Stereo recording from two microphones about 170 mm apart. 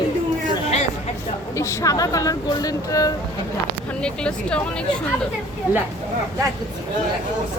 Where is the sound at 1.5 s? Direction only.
15° left (ahead or behind).